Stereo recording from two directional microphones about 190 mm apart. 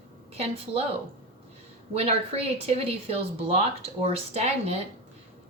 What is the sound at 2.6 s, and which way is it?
Speech, 30° right (ahead or behind).